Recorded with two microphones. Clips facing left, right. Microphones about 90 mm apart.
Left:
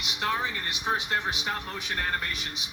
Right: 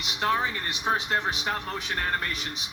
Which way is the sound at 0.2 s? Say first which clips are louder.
Right 3 dB; 25° right (ahead or behind).